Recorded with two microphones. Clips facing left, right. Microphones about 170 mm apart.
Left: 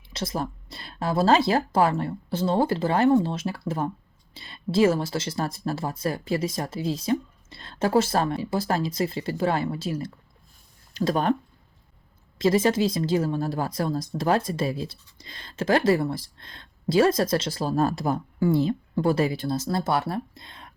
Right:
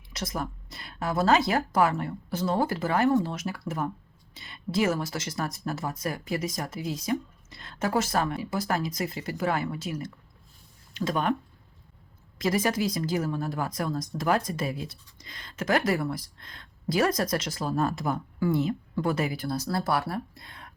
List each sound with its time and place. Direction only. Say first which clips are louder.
0.1 s a woman's voice: left 3 dB; 30° left (ahead or behind)
12.4 s a woman's voice: left 5 dB; 25° left (ahead or behind)